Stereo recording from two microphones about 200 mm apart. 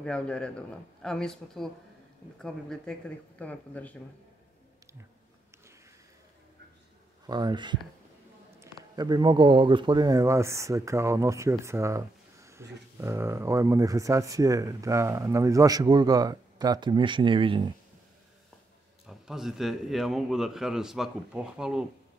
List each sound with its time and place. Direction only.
0.0 s a man's voice: 5° left (ahead or behind)
7.2 s speech: 20° right (ahead or behind)
8.9 s speech: 20° right (ahead or behind)
19.0 s a man's voice: centre (ahead or behind)